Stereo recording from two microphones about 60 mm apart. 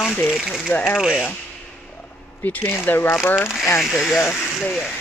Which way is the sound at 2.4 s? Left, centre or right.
Left.